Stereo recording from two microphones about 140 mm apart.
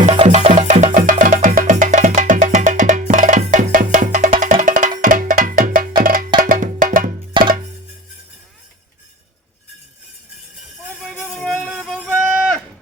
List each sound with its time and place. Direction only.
0.0 s music: 45° right (ahead or behind)
0.3 s music: 60° right (ahead or behind)
4.6 s wood block: 75° right (ahead or behind)
6.0 s music: 90° right
6.4 s music: 75° right (ahead or behind)
7.3 s music: 35° right (ahead or behind)
11.0 s music: centre (ahead or behind)